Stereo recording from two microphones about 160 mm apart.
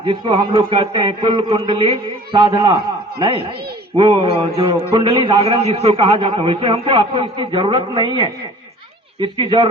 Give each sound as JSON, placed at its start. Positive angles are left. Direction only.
{"t": 0.0, "sound": "a man's voice", "side_deg": -30}